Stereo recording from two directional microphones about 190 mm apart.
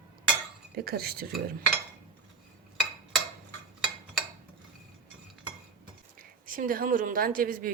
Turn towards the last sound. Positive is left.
turn(degrees=-45)  # may be behind; listen again after turning